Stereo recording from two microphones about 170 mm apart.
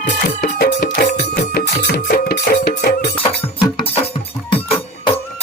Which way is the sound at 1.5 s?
70° left (ahead or behind).